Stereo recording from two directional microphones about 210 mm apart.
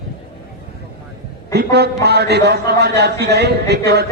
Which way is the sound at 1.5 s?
50° right (ahead or behind).